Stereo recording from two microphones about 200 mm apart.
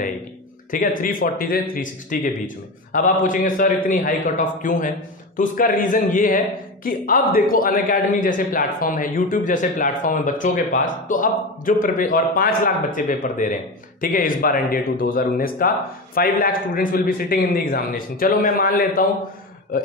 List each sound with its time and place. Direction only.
0.7 s a man's voice: 45° left (ahead or behind)